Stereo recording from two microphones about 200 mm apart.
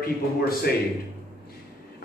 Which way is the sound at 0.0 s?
50° left (ahead or behind).